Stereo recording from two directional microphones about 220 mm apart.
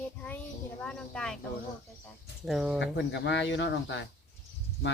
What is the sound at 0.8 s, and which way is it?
Speech, 5° left (ahead or behind).